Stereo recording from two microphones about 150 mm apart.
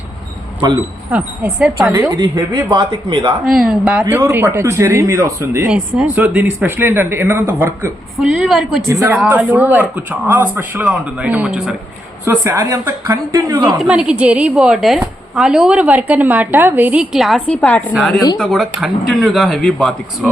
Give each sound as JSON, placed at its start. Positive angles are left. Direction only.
{"t": 1.1, "sound": "speech", "side_deg": -10}
{"t": 1.9, "sound": "a woman's voice", "side_deg": -25}
{"t": 3.4, "sound": "a woman's voice", "side_deg": 0}
{"t": 8.2, "sound": "a woman's voice", "side_deg": 0}
{"t": 13.7, "sound": "a woman's voice", "side_deg": -5}